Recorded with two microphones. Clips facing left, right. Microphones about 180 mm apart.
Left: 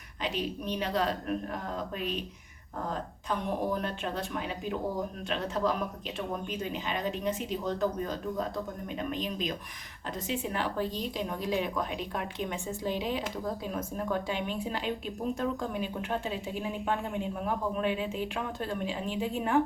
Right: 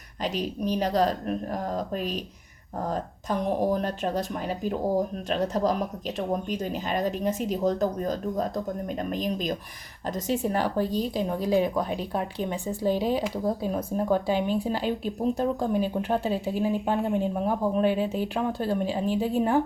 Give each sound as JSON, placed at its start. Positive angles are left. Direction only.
{"t": 0.2, "sound": "speech", "side_deg": -40}